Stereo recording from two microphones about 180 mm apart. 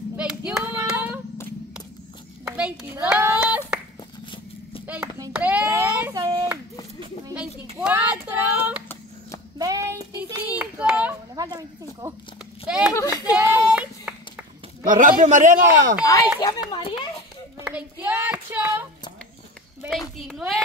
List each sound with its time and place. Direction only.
0.1 s clapping: 5° right (ahead or behind)
2.4 s clapping: 5° right (ahead or behind)
4.8 s clapping: 10° right (ahead or behind)
5.3 s child singing: 5° right (ahead or behind)
7.8 s child singing: 10° right (ahead or behind)
10.6 s a sound: 5° right (ahead or behind)
11.3 s speech: 20° right (ahead or behind)
12.6 s speech: 5° right (ahead or behind)
12.9 s speech: 20° left (ahead or behind)
13.4 s a sound: 15° right (ahead or behind)
14.9 s a man's voice: 50° right (ahead or behind)
16.3 s a sound: 20° left (ahead or behind)
17.6 s hands: 5° right (ahead or behind)
19.9 s a sound: centre (ahead or behind)